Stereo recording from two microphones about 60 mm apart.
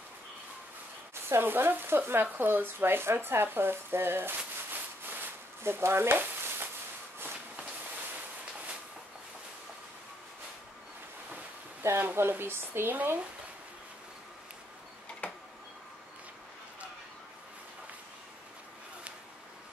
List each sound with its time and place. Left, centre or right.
1.3 s speech: right
4.6 s sizzle: right
7.2 s walk: right
11.8 s speech: right
15.2 s tick-tock: left